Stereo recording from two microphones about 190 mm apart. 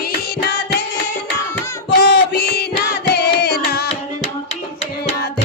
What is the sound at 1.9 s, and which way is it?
Music, 55° left (ahead or behind).